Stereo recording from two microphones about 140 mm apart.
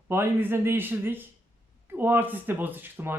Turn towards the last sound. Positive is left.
turn(degrees=-15)  # may be behind; listen again after turning